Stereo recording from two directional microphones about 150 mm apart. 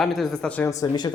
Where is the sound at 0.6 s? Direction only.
25° left (ahead or behind).